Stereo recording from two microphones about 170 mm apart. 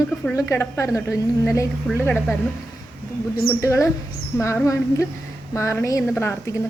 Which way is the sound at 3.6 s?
15° left (ahead or behind).